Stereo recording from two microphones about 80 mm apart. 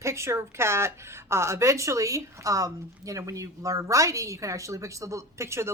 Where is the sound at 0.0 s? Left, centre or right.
Right.